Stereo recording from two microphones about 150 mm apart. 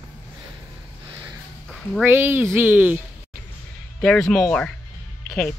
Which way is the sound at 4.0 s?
5° left (ahead or behind).